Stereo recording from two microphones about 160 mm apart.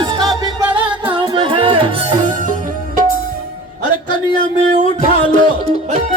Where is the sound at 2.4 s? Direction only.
55° right (ahead or behind).